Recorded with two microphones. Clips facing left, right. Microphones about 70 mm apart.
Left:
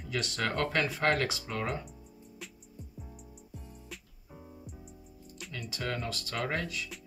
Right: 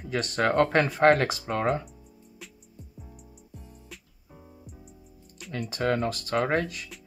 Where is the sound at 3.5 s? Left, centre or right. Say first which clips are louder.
Even; centre.